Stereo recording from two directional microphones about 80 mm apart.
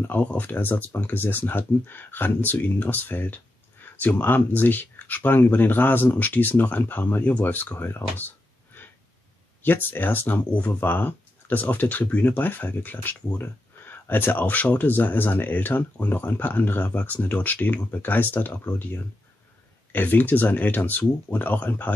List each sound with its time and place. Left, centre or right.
0.0 s speech: left